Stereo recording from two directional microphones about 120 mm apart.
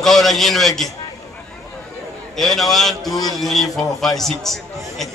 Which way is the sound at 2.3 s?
5° left (ahead or behind).